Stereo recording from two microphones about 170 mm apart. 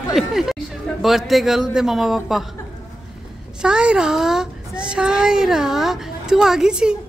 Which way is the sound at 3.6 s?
5° right (ahead or behind).